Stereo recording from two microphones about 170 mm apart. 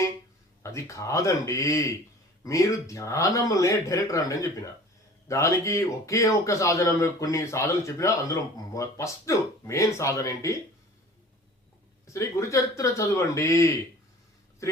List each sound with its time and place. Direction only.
0.6 s a man's voice: 20° left (ahead or behind)
12.0 s a man's voice: 15° left (ahead or behind)